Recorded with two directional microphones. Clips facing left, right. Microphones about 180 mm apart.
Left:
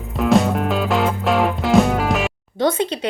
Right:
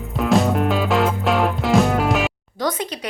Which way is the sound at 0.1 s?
Centre (ahead or behind).